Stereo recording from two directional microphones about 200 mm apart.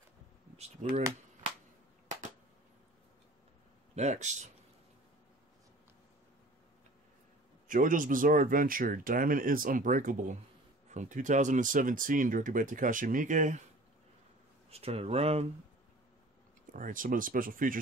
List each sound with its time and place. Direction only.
0.8 s speech: 35° right (ahead or behind)
3.9 s speech: 35° right (ahead or behind)
7.6 s speech: 40° right (ahead or behind)
14.7 s speech: 30° right (ahead or behind)
16.7 s speech: 40° right (ahead or behind)